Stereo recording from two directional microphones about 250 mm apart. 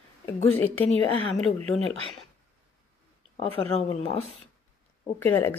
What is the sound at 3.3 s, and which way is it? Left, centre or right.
Speech, left.